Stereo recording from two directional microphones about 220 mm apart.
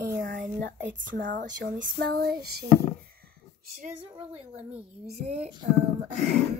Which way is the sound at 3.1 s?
40° right (ahead or behind).